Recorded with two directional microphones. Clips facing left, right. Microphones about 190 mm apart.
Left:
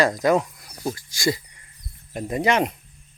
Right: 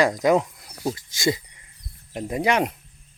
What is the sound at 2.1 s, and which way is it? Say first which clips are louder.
Speech: left 1 dB; 10° right (ahead or behind).